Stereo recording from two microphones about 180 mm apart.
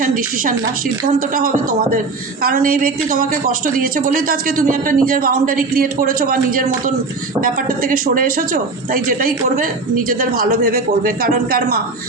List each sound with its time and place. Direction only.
0.0 s a woman's voice: 50° right (ahead or behind)